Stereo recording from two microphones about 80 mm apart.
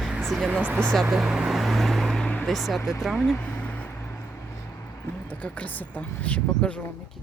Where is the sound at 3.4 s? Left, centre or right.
Centre.